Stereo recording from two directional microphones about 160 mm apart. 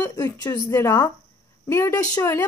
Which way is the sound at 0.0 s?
25° left (ahead or behind).